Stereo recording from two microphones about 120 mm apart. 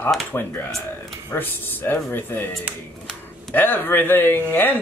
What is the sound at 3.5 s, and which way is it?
Speech, 15° left (ahead or behind).